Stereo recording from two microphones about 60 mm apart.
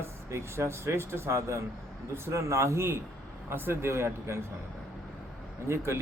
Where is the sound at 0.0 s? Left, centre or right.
Right.